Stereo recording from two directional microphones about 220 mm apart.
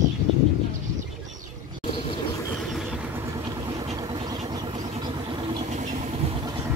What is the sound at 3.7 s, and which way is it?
Vehicle, 20° right (ahead or behind).